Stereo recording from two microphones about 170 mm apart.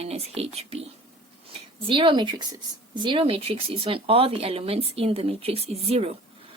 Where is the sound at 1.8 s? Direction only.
30° right (ahead or behind).